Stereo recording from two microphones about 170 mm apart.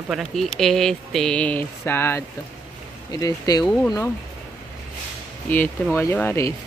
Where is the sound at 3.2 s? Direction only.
20° left (ahead or behind).